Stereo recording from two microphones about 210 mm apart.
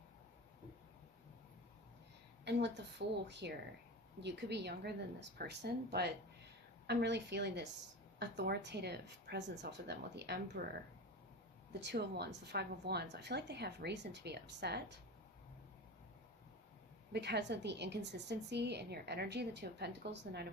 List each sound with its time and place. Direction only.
2.4 s a woman's voice: 55° right (ahead or behind)
11.8 s a woman's voice: 55° right (ahead or behind)
17.1 s a woman's voice: 55° right (ahead or behind)